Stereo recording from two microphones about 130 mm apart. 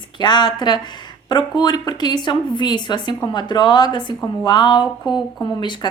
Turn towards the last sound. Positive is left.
turn(degrees=35)  # may be behind; listen again after turning